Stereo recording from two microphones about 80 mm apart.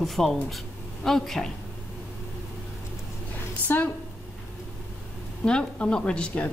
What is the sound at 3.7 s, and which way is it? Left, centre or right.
Speech, left.